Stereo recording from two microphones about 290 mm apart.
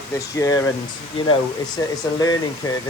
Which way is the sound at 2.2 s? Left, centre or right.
Centre.